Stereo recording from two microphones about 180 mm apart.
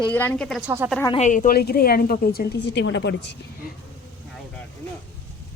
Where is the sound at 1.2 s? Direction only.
45° left (ahead or behind); by 3.3 s 75° left (ahead or behind).